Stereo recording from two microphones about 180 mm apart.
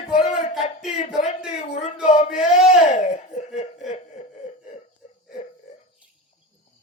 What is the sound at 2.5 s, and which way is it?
Speech, centre (ahead or behind).